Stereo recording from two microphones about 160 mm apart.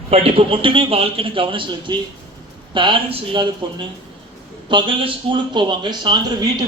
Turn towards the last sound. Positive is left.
turn(degrees=-25)  # may be behind; listen again after turning